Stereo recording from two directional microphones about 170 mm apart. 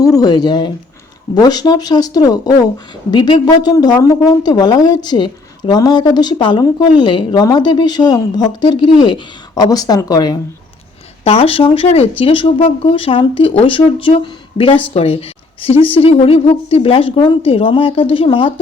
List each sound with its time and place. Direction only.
0.0 s speech: 20° left (ahead or behind)
11.2 s speech: 35° left (ahead or behind)